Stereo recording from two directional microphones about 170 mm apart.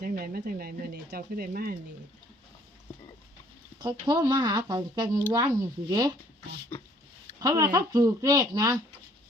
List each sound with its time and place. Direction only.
0.0 s speech: 60° right (ahead or behind)
3.8 s speech: 25° right (ahead or behind)
6.7 s a sound: 10° left (ahead or behind)
7.3 s speech: 20° right (ahead or behind)